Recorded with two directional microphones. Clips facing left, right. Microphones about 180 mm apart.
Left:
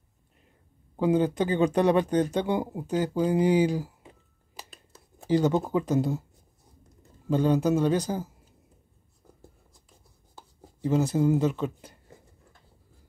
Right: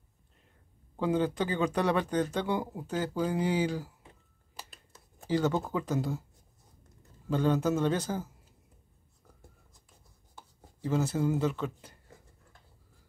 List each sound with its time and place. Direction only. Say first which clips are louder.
0.9 s speech: left 5 dB; 15° left (ahead or behind)
5.2 s speech: left 5 dB; 15° left (ahead or behind)
7.2 s speech: left 4 dB; 15° left (ahead or behind)
10.8 s speech: left 5 dB; 15° left (ahead or behind)